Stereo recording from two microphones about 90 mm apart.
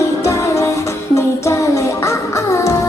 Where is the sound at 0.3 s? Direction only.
30° left (ahead or behind).